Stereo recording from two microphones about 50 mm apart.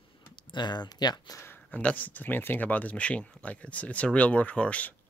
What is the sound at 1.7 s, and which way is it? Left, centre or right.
Speech, left.